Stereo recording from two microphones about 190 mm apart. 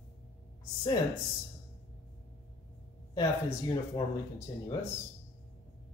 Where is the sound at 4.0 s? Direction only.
25° left (ahead or behind).